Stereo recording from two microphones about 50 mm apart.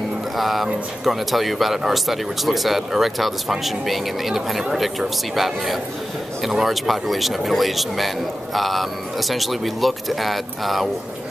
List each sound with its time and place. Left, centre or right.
0.4 s speech: centre